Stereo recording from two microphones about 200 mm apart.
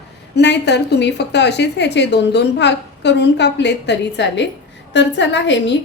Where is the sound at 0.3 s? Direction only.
60° left (ahead or behind).